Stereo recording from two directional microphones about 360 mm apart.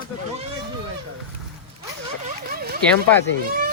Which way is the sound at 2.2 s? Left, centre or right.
Right.